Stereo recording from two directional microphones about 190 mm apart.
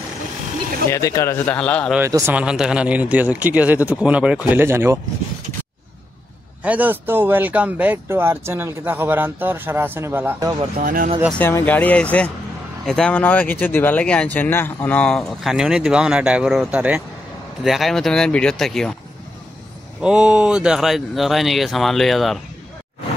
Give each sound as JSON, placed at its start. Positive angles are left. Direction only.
{"t": 0.8, "sound": "speech", "side_deg": 15}
{"t": 2.0, "sound": "speech", "side_deg": -15}
{"t": 6.6, "sound": "speech", "side_deg": -10}
{"t": 10.6, "sound": "speech", "side_deg": -45}
{"t": 11.3, "sound": "speech", "side_deg": 10}
{"t": 20.0, "sound": "speech", "side_deg": -5}